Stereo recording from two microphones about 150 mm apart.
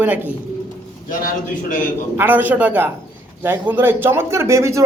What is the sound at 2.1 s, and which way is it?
Speech, 15° right (ahead or behind).